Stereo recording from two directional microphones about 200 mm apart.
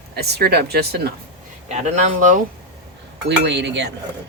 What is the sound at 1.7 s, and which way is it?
Speech, 35° right (ahead or behind).